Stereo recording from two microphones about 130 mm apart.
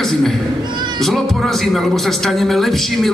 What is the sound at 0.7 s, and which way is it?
Cat, 35° right (ahead or behind).